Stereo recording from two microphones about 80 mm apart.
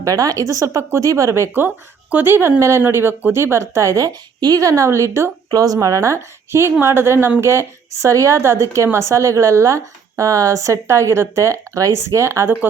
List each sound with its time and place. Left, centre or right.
0.0 s a woman's voice: right
4.4 s a woman's voice: right
5.5 s a woman's voice: right